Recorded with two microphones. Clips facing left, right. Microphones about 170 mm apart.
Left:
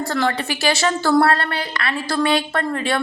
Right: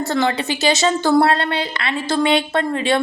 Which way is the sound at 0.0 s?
20° right (ahead or behind).